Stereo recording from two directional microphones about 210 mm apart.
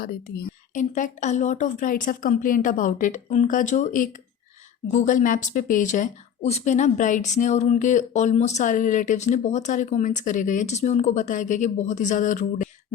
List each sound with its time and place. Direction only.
0.0 s speech: 40° left (ahead or behind)